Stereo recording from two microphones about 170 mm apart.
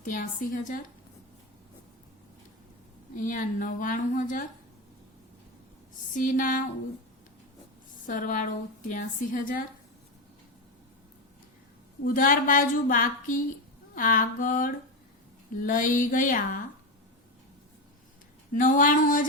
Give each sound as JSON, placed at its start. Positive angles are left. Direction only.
{"t": 0.0, "sound": "a woman's voice", "side_deg": 50}
{"t": 3.2, "sound": "a woman's voice", "side_deg": 50}
{"t": 6.1, "sound": "a woman's voice", "side_deg": 50}
{"t": 8.0, "sound": "a woman's voice", "side_deg": 50}
{"t": 12.0, "sound": "a woman's voice", "side_deg": 55}
{"t": 18.5, "sound": "a woman's voice", "side_deg": 50}